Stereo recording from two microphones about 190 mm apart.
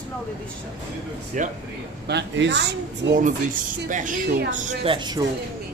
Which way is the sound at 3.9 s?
40° right (ahead or behind).